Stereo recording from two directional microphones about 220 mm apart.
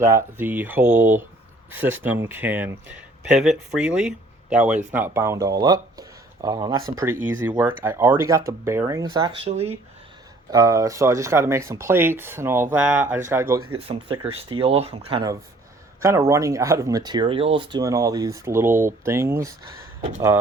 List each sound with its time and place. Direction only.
0.0 s speech: 10° right (ahead or behind)
10.5 s speech: 15° right (ahead or behind)
13.7 s speech: 25° right (ahead or behind); by 20.4 s 10° right (ahead or behind)